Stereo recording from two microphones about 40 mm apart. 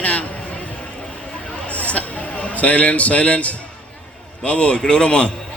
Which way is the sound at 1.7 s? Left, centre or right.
Left.